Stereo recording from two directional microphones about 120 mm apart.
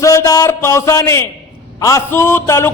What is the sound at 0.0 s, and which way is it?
A man's voice, 25° left (ahead or behind).